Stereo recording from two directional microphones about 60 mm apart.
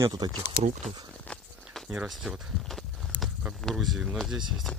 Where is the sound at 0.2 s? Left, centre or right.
Right.